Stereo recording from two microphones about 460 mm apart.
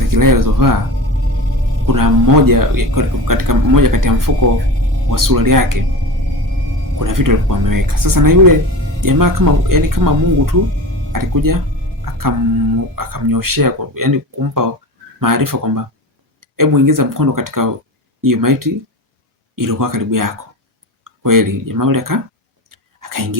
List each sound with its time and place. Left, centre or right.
0.1 s speech: right
1.9 s speech: right
7.0 s speech: right
12.0 s music: right
13.0 s speech: right
22.7 s whispering: right